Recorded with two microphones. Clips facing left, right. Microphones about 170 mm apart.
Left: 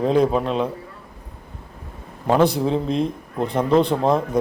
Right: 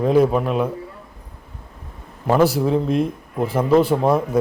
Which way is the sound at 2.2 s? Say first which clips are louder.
Right 1 dB; 5° right (ahead or behind).